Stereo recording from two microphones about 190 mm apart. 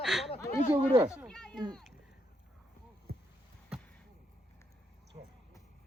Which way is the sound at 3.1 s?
55° right (ahead or behind).